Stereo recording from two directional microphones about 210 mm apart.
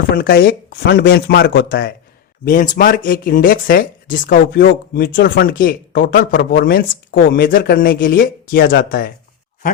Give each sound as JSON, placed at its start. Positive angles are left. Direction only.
{"t": 0.2, "sound": "speech", "side_deg": 50}